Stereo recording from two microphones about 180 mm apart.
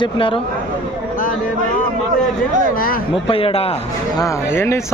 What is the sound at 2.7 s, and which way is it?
Speech, 55° left (ahead or behind).